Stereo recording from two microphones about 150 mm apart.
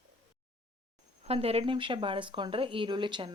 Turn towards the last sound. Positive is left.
turn(degrees=-30)  # may be behind; listen again after turning